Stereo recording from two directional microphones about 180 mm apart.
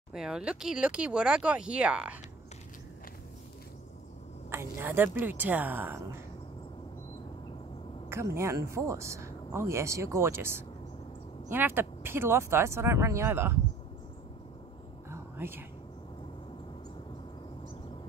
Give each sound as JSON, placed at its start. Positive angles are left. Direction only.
{"t": 0.1, "sound": "speech", "side_deg": -5}
{"t": 4.5, "sound": "speech", "side_deg": -15}
{"t": 8.1, "sound": "speech", "side_deg": -15}
{"t": 15.0, "sound": "whispering", "side_deg": -10}